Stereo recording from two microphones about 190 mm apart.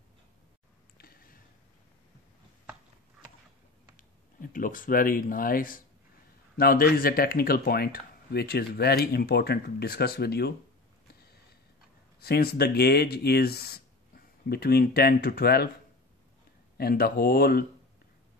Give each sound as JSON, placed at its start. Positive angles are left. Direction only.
{"t": 0.9, "sound": "a sound", "side_deg": 50}
{"t": 3.9, "sound": "speech", "side_deg": 45}
{"t": 12.2, "sound": "speech", "side_deg": 55}
{"t": 16.7, "sound": "speech", "side_deg": 55}